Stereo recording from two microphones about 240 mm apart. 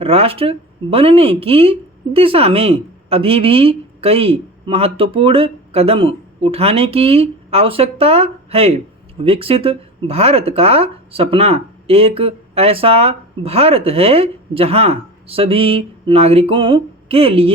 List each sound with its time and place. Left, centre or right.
0.0 s speech: right